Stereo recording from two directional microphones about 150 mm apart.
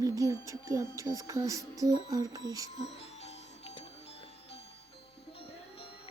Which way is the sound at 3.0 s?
45° left (ahead or behind).